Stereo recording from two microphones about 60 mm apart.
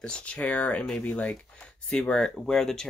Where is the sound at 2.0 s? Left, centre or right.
Centre.